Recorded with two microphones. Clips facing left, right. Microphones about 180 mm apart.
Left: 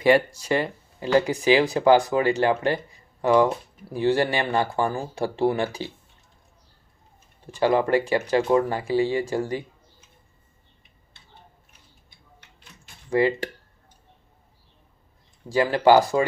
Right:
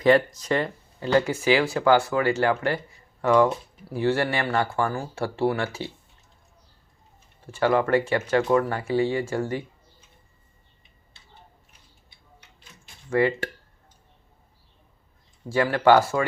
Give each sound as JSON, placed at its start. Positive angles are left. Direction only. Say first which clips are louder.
{"t": 0.0, "sound": "speech", "louder": "even", "side_deg": 10}
{"t": 7.5, "sound": "speech", "louder": "left 1 dB", "side_deg": 15}
{"t": 13.1, "sound": "speech", "louder": "left 1 dB", "side_deg": 15}
{"t": 15.4, "sound": "speech", "louder": "left 1 dB", "side_deg": 15}